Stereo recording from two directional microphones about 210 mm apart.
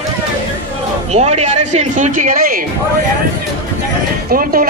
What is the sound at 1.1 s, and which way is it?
Speech, 30° right (ahead or behind).